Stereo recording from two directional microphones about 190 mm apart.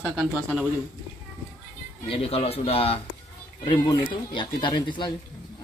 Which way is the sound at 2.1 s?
30° left (ahead or behind).